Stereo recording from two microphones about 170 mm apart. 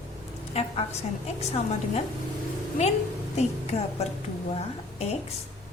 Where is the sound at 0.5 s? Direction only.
40° left (ahead or behind).